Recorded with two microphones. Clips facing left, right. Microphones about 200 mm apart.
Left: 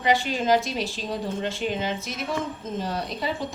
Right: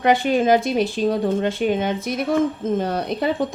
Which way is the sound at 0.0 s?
55° right (ahead or behind).